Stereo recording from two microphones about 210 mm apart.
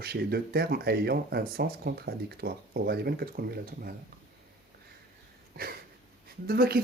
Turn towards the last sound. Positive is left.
turn(degrees=-45)  # may be behind; listen again after turning